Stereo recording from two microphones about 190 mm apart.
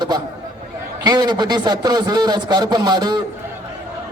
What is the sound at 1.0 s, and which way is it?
A man's voice, 20° right (ahead or behind).